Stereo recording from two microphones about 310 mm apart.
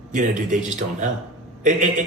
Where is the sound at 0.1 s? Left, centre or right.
Right.